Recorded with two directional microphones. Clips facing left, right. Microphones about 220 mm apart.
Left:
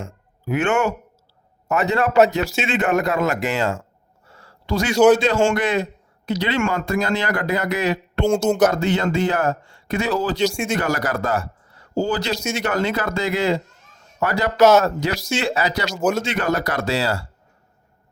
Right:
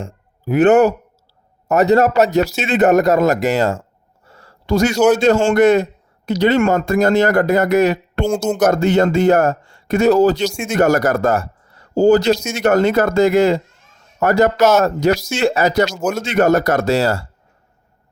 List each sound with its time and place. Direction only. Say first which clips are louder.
0.0 s a man's voice: right 4 dB; 35° right (ahead or behind)
8.3 s speech: left 1 dB; centre (ahead or behind)
8.6 s a man's voice: right 4 dB; 45° right (ahead or behind)
10.4 s speech: even; centre (ahead or behind)
10.8 s a man's voice: right 8 dB; 45° right (ahead or behind)
15.9 s speech: even; centre (ahead or behind)
16.2 s a man's voice: right 8 dB; 45° right (ahead or behind)